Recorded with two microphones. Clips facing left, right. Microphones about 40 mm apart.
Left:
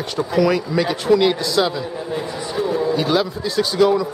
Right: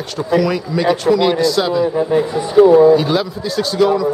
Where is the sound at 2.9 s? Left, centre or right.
Centre.